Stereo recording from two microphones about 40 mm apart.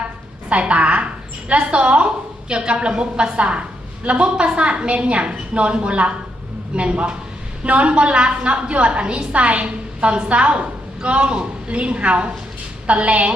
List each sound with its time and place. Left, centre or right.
0.5 s a woman's voice: right